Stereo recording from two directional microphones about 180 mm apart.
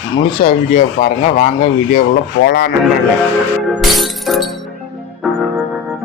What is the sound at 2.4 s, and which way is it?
Speech, 65° left (ahead or behind).